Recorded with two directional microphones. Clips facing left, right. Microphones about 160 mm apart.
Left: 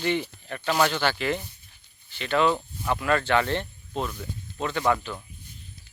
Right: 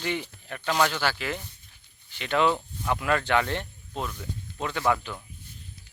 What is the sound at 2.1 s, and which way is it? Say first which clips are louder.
Speech: left 1 dB; 15° right (ahead or behind).